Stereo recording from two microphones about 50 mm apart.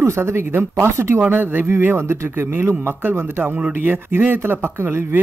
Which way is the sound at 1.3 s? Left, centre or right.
Right.